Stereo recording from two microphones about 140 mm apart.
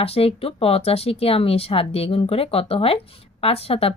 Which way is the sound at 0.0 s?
45° left (ahead or behind).